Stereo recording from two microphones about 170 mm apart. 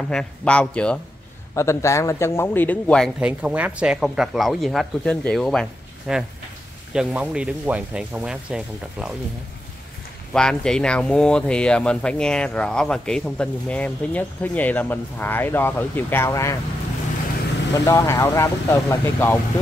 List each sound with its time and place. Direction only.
0.1 s speech: 5° left (ahead or behind)
3.2 s speech: 5° right (ahead or behind)
10.3 s speech: 5° left (ahead or behind)
17.7 s speech: 20° left (ahead or behind)